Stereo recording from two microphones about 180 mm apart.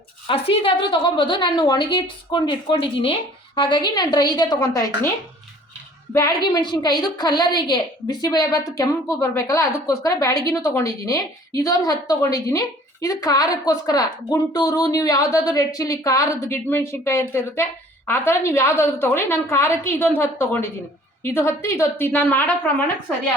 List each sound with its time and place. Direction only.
0.3 s a woman's voice: 30° left (ahead or behind)
6.1 s a woman's voice: 20° left (ahead or behind)